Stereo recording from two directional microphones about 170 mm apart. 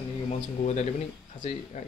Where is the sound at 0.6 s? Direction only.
45° left (ahead or behind).